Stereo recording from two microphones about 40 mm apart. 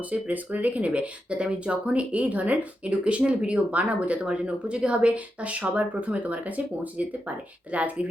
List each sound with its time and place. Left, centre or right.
0.0 s speech: right